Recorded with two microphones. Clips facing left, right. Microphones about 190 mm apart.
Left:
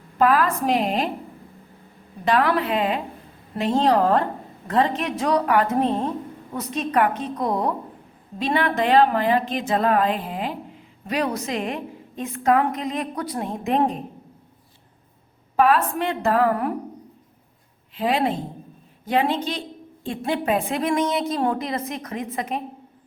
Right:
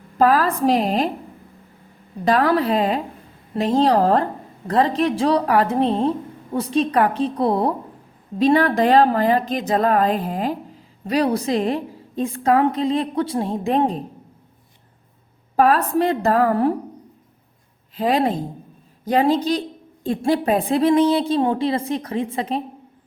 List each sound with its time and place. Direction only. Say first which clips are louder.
0.2 s a woman's voice: right 2 dB; 35° right (ahead or behind)
2.2 s a woman's voice: right 3 dB; 40° right (ahead or behind)
15.5 s a woman's voice: right 2 dB; 40° right (ahead or behind)
17.9 s a woman's voice: right 3 dB; 40° right (ahead or behind)